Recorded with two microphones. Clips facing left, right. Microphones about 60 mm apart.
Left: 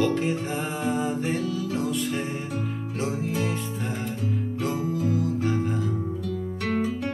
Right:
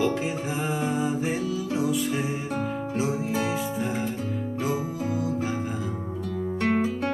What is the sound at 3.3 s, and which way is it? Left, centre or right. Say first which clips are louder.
Music: right 1 dB; centre.